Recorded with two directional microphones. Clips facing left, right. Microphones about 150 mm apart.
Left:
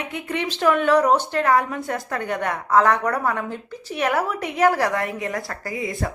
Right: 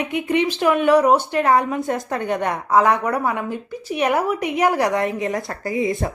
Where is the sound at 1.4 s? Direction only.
20° right (ahead or behind).